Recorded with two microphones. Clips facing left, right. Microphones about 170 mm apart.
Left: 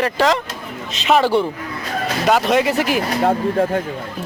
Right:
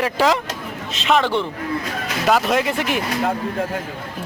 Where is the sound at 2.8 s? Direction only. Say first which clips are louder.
Left 4 dB; 35° left (ahead or behind).